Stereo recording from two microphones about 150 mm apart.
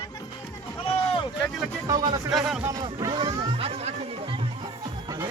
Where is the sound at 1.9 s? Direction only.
25° right (ahead or behind).